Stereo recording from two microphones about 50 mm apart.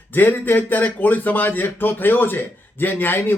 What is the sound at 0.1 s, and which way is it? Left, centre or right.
A man's voice, left.